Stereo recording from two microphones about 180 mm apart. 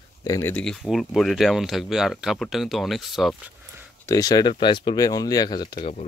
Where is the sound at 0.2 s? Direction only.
15° left (ahead or behind); by 3.5 s centre (ahead or behind).